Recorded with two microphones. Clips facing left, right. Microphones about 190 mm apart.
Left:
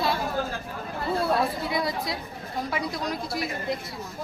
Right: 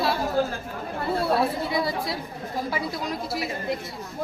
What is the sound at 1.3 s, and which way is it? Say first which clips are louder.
Speech: right 2 dB; centre (ahead or behind).